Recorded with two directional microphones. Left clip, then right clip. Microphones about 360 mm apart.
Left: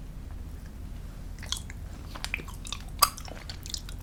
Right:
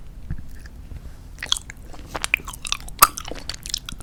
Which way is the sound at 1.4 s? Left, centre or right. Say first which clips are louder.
Right 12 dB; right.